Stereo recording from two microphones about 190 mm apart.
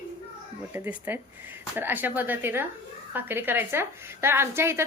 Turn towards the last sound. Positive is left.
turn(degrees=-15)  # may be behind; listen again after turning